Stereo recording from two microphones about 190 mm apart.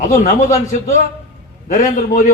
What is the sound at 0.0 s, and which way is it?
A man's voice, 40° left (ahead or behind).